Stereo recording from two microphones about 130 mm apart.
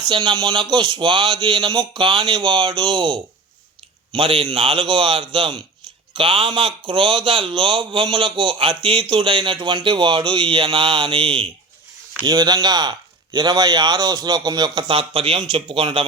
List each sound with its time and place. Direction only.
0.1 s speech: 35° right (ahead or behind)
5.8 s a sound: 40° right (ahead or behind)
6.1 s speech: 45° right (ahead or behind)
12.2 s speech: 30° right (ahead or behind)